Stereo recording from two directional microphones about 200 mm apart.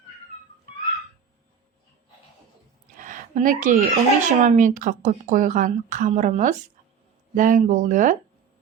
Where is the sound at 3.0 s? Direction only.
40° right (ahead or behind).